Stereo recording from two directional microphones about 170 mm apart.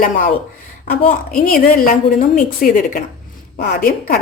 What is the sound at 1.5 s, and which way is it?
A woman's voice, 55° left (ahead or behind).